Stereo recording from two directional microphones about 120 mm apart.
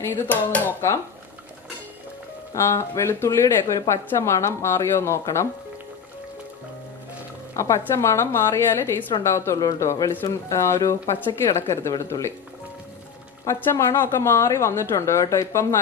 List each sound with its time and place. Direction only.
0.0 s speech: 15° left (ahead or behind)
2.5 s speech: 25° left (ahead or behind)
7.5 s speech: 25° left (ahead or behind)
13.5 s speech: 20° left (ahead or behind)